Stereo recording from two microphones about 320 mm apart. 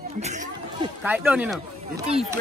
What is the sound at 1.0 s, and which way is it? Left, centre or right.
Speech, centre.